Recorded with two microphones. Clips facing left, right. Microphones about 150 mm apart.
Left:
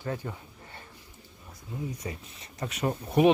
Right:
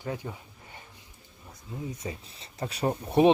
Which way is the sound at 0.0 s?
15° right (ahead or behind).